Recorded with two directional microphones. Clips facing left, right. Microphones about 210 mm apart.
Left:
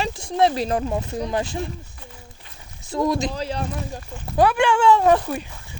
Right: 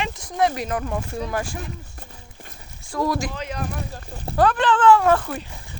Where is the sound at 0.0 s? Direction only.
30° left (ahead or behind).